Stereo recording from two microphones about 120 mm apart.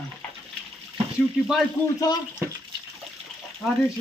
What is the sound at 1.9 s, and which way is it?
Speech, 35° left (ahead or behind).